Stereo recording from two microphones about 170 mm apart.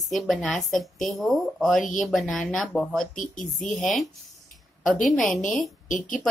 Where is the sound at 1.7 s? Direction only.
50° left (ahead or behind).